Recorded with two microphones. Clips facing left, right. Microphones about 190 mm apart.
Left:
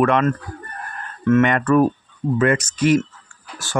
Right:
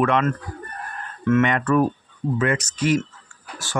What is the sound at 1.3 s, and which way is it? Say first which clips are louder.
Speech: left 3 dB; 50° left (ahead or behind).